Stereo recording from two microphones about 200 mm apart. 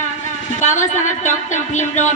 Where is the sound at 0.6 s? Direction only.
40° left (ahead or behind).